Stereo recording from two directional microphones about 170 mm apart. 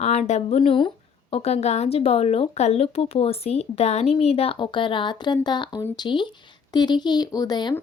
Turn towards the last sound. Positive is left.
turn(degrees=25)  # may be behind; listen again after turning